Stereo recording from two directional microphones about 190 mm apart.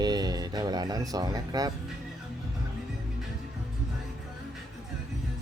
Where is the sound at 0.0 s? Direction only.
20° right (ahead or behind).